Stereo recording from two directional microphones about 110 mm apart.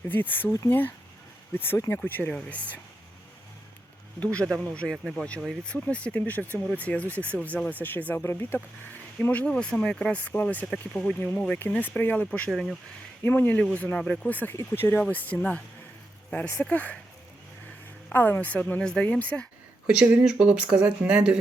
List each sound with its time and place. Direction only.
0.1 s speech: 20° left (ahead or behind)
4.2 s speech: 10° left (ahead or behind)
12.5 s speech: centre (ahead or behind)
13.2 s speech: 15° left (ahead or behind)
18.1 s speech: 15° left (ahead or behind)
20.0 s speech: 10° right (ahead or behind)